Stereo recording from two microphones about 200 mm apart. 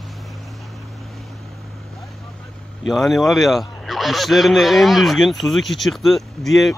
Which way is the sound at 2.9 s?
Centre (ahead or behind).